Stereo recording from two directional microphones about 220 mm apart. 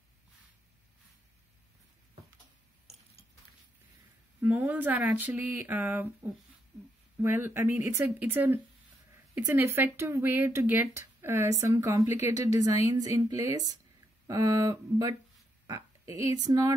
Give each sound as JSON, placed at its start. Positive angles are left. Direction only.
{"t": 4.4, "sound": "speech", "side_deg": -5}
{"t": 7.2, "sound": "speech", "side_deg": -10}